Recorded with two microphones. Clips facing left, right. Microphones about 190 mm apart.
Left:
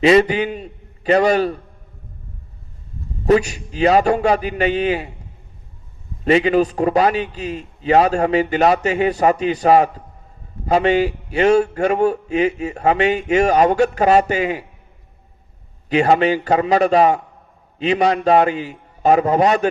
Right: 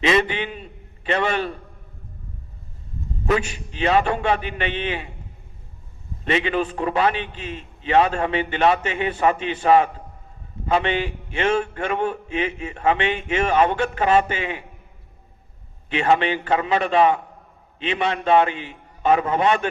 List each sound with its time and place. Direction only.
0.0 s a man's voice: 35° left (ahead or behind)
3.2 s a man's voice: 40° left (ahead or behind)
6.2 s a man's voice: 40° left (ahead or behind)
15.9 s a man's voice: 40° left (ahead or behind)